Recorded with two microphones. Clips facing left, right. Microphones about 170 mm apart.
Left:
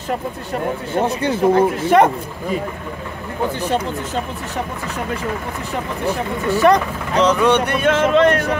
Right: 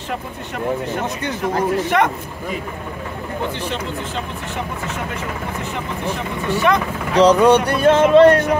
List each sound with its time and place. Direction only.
0.9 s speech: 30° left (ahead or behind)
6.5 s speech: 40° left (ahead or behind)
7.2 s speech: 35° right (ahead or behind)